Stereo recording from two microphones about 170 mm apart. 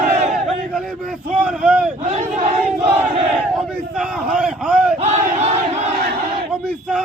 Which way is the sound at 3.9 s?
Centre (ahead or behind).